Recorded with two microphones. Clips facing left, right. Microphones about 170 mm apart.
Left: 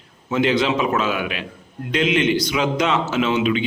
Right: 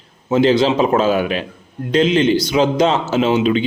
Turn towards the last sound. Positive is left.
turn(degrees=-35)  # may be behind; listen again after turning